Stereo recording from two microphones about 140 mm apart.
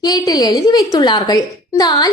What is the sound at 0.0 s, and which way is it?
A woman's voice, 30° left (ahead or behind).